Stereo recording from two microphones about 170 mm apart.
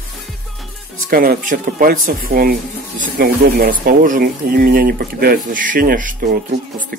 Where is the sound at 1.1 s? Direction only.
60° right (ahead or behind).